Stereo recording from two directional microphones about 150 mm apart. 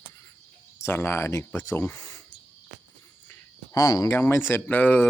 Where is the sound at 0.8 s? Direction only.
15° left (ahead or behind).